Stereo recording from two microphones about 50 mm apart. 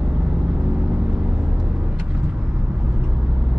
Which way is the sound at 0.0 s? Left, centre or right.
Centre.